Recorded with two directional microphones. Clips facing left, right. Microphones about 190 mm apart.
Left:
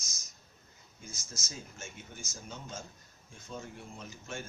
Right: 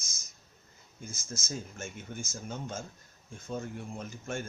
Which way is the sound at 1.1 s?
50° right (ahead or behind).